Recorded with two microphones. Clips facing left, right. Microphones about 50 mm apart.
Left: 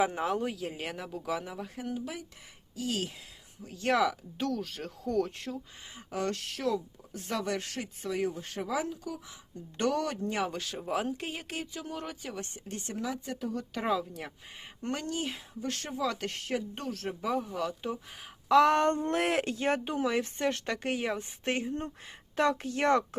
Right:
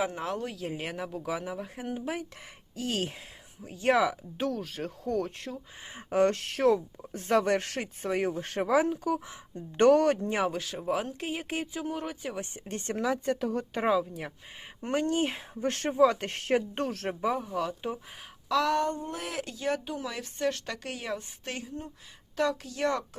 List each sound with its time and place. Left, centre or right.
0.1 s speech: centre
1.7 s speech: right
3.6 s speech: centre
6.1 s speech: right
10.4 s speech: centre
11.4 s speech: centre
12.6 s speech: right
12.9 s speech: right
13.7 s speech: centre
14.9 s speech: right
17.3 s speech: centre
18.4 s speech: left
19.1 s speech: left